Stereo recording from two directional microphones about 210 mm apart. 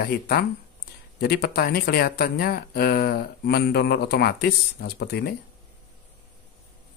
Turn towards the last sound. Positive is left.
turn(degrees=50)  # may be behind; listen again after turning